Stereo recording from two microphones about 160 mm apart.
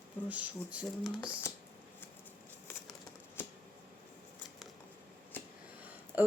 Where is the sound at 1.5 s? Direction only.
15° left (ahead or behind).